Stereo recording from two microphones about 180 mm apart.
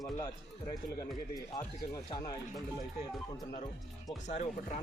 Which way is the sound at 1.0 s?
15° left (ahead or behind).